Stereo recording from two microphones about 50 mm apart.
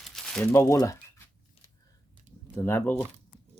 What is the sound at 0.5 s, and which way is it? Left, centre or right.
Speech, left.